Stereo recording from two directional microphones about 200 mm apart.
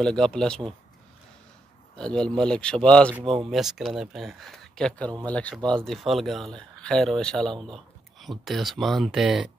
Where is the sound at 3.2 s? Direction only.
25° right (ahead or behind).